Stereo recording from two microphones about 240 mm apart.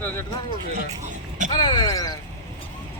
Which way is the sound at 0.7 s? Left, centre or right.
Right.